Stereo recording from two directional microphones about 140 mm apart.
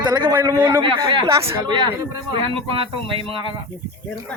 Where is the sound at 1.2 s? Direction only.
25° right (ahead or behind).